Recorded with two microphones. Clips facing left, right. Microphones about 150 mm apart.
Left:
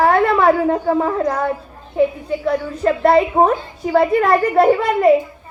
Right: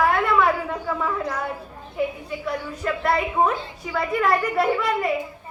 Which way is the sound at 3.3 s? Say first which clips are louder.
Left 6 dB; 45° left (ahead or behind).